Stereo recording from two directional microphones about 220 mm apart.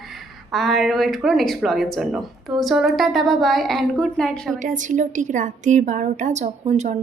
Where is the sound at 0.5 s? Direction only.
Centre (ahead or behind).